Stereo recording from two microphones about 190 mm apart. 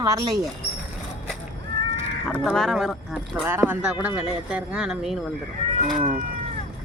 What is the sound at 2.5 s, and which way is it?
Speech, centre (ahead or behind).